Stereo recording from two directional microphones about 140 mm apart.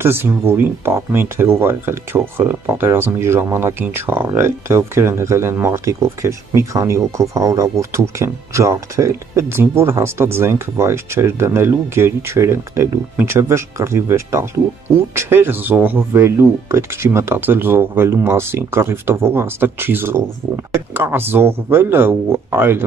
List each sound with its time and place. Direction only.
0.0 s speech: 15° right (ahead or behind)